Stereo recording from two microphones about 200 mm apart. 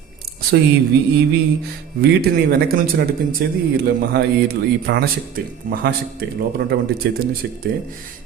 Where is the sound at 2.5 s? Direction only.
50° right (ahead or behind).